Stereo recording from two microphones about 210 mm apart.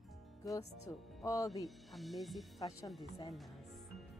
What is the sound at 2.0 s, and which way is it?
Speech, centre (ahead or behind).